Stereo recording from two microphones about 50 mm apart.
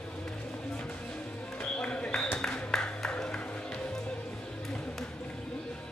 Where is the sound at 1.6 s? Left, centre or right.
Centre.